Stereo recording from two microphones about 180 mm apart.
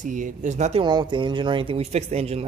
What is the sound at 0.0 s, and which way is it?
Speech, 45° right (ahead or behind).